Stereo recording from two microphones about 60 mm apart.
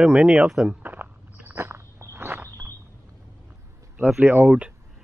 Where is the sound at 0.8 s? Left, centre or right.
Right.